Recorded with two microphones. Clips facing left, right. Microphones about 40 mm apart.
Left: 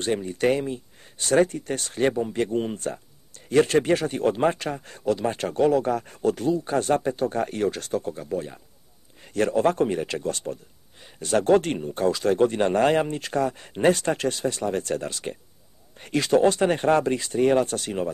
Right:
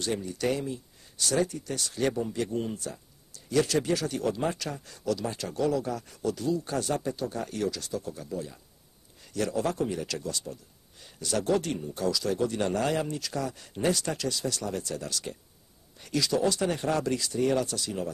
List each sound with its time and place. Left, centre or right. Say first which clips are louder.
0.0 s speech: left 6 dB; left